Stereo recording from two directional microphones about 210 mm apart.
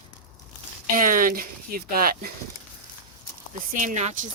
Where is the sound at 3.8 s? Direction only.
35° right (ahead or behind).